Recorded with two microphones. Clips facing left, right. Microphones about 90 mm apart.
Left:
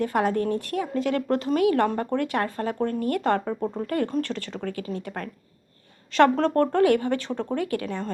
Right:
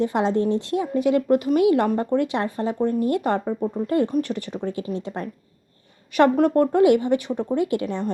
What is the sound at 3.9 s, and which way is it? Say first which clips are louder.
Speech: right 5 dB; 20° right (ahead or behind).